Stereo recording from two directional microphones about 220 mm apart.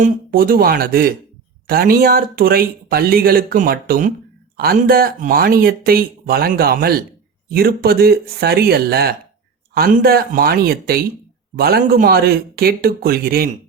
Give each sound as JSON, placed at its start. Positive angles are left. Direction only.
{"t": 0.0, "sound": "speech", "side_deg": -40}